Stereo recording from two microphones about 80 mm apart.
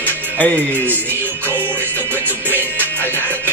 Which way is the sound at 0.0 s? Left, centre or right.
Left.